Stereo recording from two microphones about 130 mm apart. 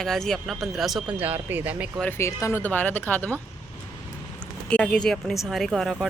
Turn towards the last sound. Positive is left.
turn(degrees=0)  # may be behind; listen again after turning